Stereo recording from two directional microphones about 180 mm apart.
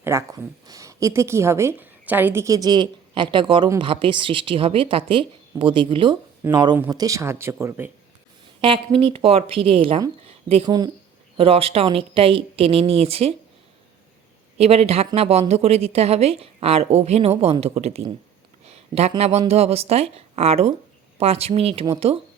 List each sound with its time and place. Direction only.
0.0 s a woman's voice: 15° right (ahead or behind)
8.6 s a woman's voice: 30° right (ahead or behind)
14.6 s speech: 35° right (ahead or behind)